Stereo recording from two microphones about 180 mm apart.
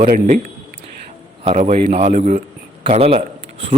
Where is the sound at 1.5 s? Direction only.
40° right (ahead or behind).